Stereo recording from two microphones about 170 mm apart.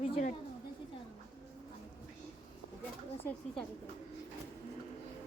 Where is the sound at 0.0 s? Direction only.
35° left (ahead or behind).